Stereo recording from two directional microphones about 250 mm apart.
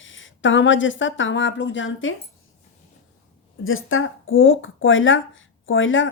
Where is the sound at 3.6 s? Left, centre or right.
Left.